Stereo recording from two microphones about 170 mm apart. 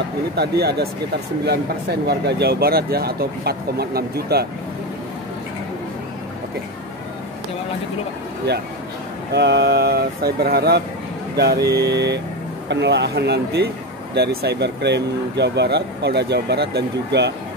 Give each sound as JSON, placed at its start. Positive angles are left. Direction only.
{"t": 0.4, "sound": "speech", "side_deg": -75}
{"t": 9.3, "sound": "speech", "side_deg": -85}